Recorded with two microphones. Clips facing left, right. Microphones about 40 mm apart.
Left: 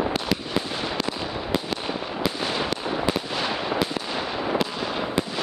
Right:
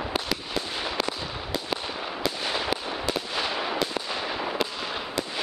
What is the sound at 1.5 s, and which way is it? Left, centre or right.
Fireworks, left.